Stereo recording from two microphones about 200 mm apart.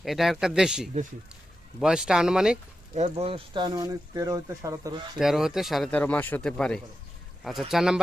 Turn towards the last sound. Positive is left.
turn(degrees=0)  # may be behind; listen again after turning